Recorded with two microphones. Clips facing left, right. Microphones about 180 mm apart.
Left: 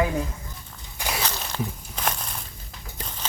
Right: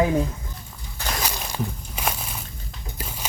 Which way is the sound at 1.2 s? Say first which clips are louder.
Right 3 dB; 10° right (ahead or behind).